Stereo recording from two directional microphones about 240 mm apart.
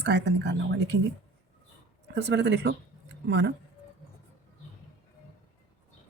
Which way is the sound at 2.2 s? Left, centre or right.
Right.